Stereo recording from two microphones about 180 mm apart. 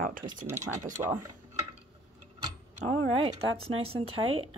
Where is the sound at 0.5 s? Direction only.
15° right (ahead or behind).